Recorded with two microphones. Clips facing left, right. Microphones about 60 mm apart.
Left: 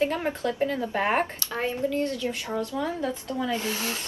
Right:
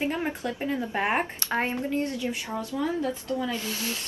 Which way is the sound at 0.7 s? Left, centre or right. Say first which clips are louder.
Left 1 dB; right.